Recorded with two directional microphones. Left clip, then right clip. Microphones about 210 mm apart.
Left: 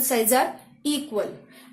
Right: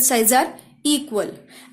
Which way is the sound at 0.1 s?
45° right (ahead or behind).